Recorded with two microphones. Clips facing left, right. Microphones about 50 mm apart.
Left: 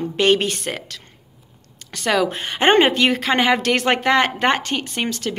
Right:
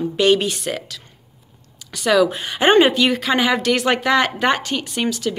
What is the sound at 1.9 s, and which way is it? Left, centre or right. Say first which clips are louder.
A woman's voice: right 3 dB; left.